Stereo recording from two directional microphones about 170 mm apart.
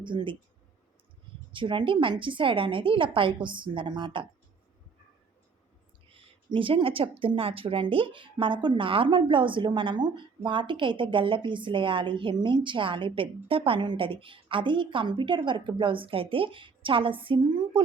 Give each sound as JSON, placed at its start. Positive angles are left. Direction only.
{"t": 0.0, "sound": "speech", "side_deg": -30}
{"t": 1.5, "sound": "speech", "side_deg": -30}
{"t": 6.1, "sound": "speech", "side_deg": -30}